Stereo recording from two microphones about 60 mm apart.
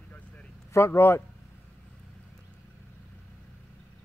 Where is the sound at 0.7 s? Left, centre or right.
Left.